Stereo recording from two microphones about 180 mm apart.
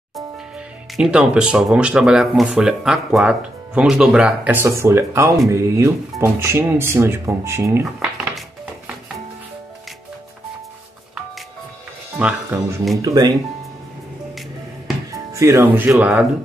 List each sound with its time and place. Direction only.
0.9 s speech: 5° right (ahead or behind)
12.2 s speech: 5° right (ahead or behind)
12.9 s speech: 20° right (ahead or behind)
15.3 s speech: 15° right (ahead or behind)